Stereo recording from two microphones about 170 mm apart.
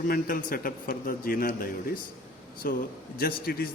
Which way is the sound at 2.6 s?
60° left (ahead or behind).